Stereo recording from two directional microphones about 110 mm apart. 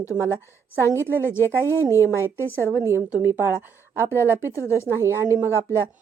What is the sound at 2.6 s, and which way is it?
Speech, 25° right (ahead or behind).